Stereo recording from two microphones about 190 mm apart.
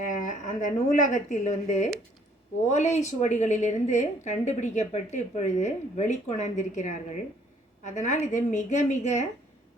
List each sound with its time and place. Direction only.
0.1 s a woman's voice: 40° left (ahead or behind)